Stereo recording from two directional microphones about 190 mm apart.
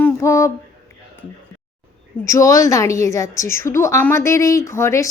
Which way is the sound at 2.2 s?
15° left (ahead or behind).